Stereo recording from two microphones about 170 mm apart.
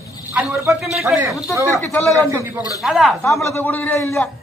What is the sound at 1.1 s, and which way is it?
Speech, 5° right (ahead or behind).